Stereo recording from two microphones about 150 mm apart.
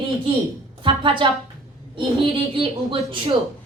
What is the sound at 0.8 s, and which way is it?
A woman's voice, 35° right (ahead or behind).